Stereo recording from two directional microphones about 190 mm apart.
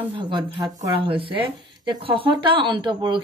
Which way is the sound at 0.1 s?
25° right (ahead or behind).